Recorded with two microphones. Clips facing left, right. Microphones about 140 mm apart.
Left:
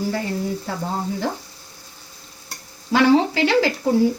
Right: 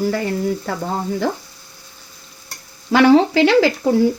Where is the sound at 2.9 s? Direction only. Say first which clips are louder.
Right 4 dB; 75° right (ahead or behind).